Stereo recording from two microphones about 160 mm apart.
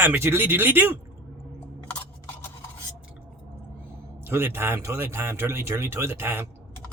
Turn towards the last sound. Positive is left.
turn(degrees=-15)  # may be behind; listen again after turning